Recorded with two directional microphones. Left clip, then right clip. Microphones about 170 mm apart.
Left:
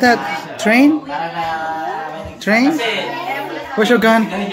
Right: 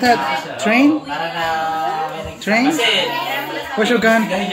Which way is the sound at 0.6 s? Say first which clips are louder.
Left 2 dB; 25° left (ahead or behind).